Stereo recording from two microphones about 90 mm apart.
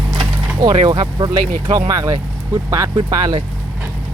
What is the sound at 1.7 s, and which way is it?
Speech, 45° right (ahead or behind).